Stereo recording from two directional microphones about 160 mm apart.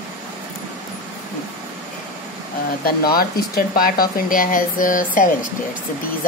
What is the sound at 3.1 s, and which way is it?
Speech, 65° left (ahead or behind).